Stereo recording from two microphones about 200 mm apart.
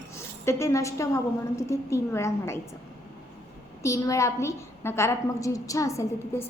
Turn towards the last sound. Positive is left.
turn(degrees=15)  # may be behind; listen again after turning